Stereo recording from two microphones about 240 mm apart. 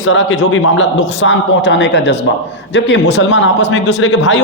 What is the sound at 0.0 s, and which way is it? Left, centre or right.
A man's voice, left.